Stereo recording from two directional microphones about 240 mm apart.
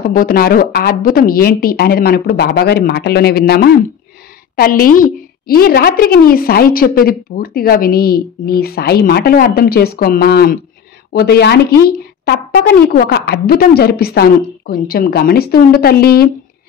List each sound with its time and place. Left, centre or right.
0.1 s a woman's voice: left